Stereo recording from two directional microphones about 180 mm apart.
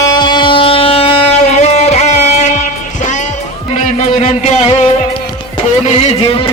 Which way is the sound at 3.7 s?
40° left (ahead or behind).